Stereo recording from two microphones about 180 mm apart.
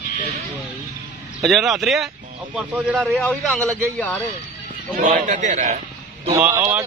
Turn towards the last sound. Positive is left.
turn(degrees=-15)  # may be behind; listen again after turning